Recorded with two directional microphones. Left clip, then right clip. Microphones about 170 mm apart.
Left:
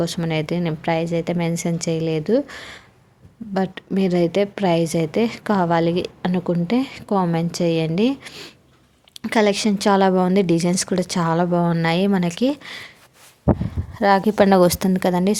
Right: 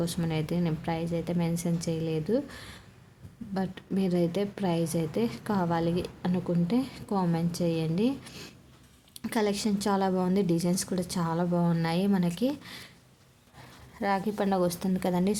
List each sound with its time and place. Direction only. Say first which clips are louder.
0.0 s a woman's voice: left 9 dB; 20° left (ahead or behind)
8.3 s speech: left 8 dB; 10° left (ahead or behind)
9.3 s a woman's voice: left 11 dB; 25° left (ahead or behind)